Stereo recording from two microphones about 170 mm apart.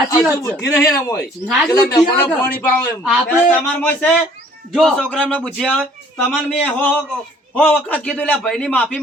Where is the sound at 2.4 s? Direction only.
10° left (ahead or behind).